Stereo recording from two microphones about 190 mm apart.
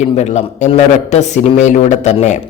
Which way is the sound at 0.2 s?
35° left (ahead or behind).